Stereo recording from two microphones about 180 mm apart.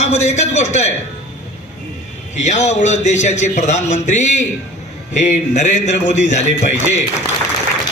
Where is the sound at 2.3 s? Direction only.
40° left (ahead or behind).